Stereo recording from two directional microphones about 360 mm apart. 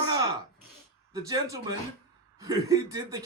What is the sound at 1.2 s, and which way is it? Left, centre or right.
Speech, centre.